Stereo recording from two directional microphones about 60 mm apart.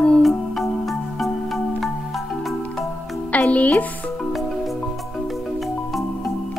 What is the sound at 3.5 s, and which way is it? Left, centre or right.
Speech, left.